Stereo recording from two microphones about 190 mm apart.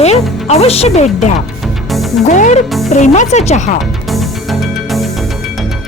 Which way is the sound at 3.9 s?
Centre (ahead or behind).